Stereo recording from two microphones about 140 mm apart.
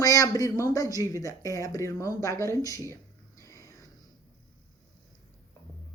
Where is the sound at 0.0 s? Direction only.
25° left (ahead or behind).